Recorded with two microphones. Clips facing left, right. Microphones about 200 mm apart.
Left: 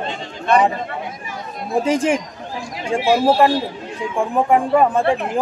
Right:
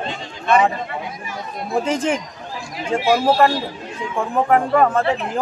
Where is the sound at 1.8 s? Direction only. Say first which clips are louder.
Left 3 dB; 15° left (ahead or behind).